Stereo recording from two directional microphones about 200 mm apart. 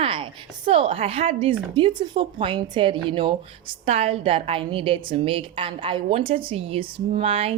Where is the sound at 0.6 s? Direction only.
30° right (ahead or behind).